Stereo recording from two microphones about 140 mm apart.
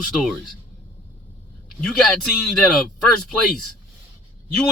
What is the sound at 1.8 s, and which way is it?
A man's voice, 5° left (ahead or behind).